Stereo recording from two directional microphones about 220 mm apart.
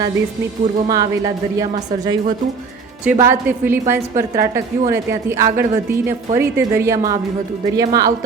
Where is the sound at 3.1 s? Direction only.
10° right (ahead or behind).